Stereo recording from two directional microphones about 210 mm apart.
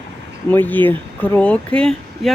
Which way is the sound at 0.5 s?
10° left (ahead or behind).